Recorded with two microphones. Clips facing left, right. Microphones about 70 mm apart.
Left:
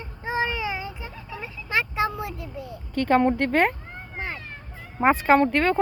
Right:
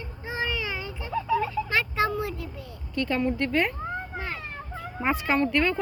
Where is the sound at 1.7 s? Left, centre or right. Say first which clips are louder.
Left 3 dB; centre.